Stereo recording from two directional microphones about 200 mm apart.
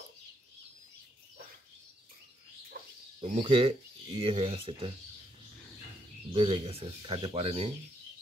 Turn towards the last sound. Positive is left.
turn(degrees=-30)  # may be behind; listen again after turning